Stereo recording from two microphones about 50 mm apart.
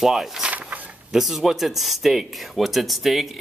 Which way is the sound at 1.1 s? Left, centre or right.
Centre.